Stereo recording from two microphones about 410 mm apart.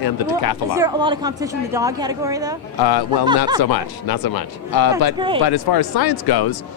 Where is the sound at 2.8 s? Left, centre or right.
Left.